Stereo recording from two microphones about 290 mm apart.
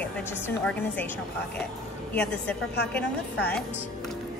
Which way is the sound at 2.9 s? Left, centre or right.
Centre.